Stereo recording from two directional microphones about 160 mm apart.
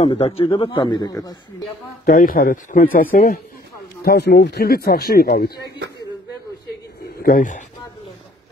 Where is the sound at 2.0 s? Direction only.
60° left (ahead or behind).